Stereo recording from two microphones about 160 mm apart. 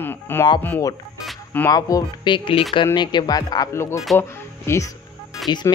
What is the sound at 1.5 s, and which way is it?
Speech, 20° left (ahead or behind).